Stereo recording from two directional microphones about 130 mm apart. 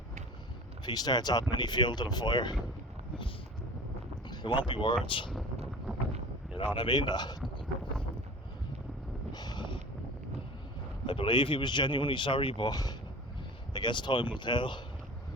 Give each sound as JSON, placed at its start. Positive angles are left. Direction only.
{"t": 0.9, "sound": "speech", "side_deg": 30}
{"t": 4.3, "sound": "speech", "side_deg": 40}
{"t": 6.7, "sound": "speech", "side_deg": 35}
{"t": 9.3, "sound": "vehicle", "side_deg": 30}
{"t": 11.0, "sound": "speech", "side_deg": 40}